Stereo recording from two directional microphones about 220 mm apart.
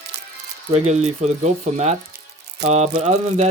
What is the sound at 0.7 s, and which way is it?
Speech, 30° right (ahead or behind).